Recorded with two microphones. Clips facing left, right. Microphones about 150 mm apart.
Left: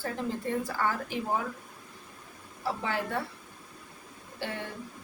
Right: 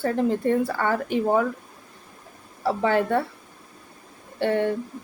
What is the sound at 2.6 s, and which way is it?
Speech, 60° right (ahead or behind).